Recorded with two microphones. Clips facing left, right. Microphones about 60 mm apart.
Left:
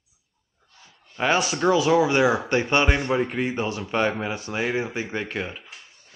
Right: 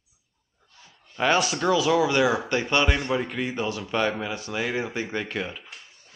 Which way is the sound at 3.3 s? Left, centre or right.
Left.